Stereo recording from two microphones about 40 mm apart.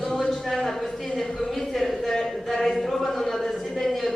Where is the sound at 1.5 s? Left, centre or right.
Centre.